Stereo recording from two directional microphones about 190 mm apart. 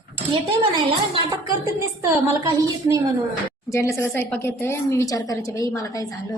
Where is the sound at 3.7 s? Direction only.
15° left (ahead or behind).